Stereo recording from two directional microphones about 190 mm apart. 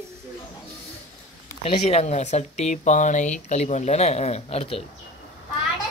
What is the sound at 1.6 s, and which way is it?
Speech, 35° left (ahead or behind).